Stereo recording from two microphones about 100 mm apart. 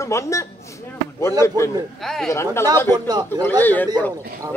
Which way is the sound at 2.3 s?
25° left (ahead or behind).